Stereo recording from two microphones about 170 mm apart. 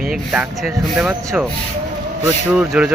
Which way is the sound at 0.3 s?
Centre (ahead or behind).